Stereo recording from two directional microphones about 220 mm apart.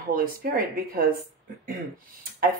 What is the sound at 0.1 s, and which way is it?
Speech, 40° right (ahead or behind).